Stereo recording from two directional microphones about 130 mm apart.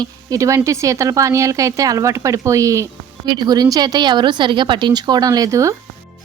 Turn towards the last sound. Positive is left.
turn(degrees=-25)  # may be behind; listen again after turning